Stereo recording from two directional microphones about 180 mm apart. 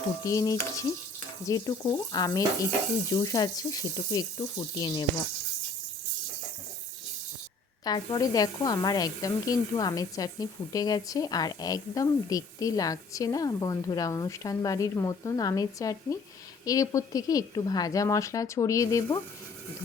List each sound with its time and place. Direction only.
0.3 s dishes: 20° left (ahead or behind)
1.5 s speech: 20° left (ahead or behind)
7.9 s speech: 20° left (ahead or behind)